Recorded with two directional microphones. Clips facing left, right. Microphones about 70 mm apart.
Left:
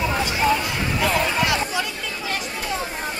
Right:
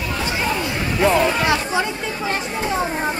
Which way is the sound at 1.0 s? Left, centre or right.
Right.